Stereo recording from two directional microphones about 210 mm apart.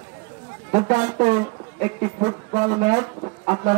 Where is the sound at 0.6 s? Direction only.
35° right (ahead or behind).